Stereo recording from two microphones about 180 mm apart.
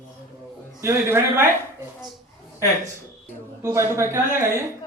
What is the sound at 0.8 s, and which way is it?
Speech, 15° right (ahead or behind).